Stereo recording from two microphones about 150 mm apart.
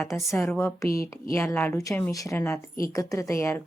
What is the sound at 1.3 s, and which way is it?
Speech, 15° left (ahead or behind).